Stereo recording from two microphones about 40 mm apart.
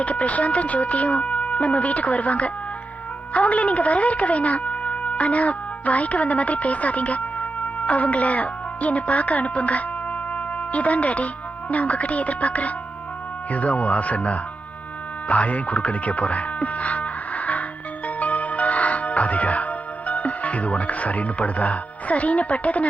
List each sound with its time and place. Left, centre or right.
0.0 s speech: left
10.3 s music: left
11.7 s speech: left
18.2 s music: left